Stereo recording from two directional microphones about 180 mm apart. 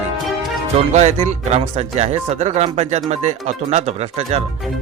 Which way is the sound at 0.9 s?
40° right (ahead or behind).